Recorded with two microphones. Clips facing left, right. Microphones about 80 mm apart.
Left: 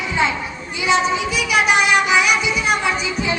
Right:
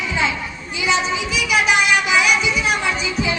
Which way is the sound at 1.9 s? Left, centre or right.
Centre.